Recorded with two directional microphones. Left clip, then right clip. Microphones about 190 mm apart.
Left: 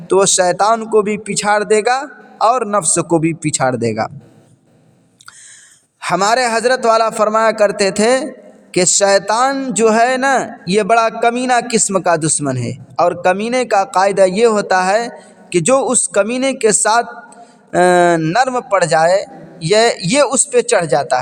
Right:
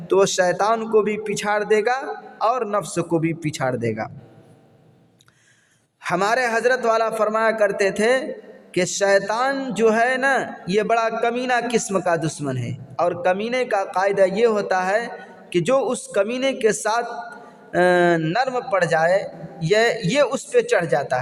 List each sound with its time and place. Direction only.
0.1 s a man's voice: 25° left (ahead or behind)
6.0 s a man's voice: 25° left (ahead or behind)